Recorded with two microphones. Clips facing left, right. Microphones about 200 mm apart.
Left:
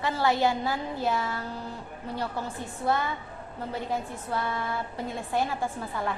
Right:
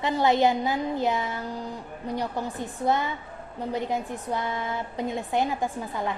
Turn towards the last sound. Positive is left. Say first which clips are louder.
# right 2 dB
turn(degrees=-15)  # may be behind; listen again after turning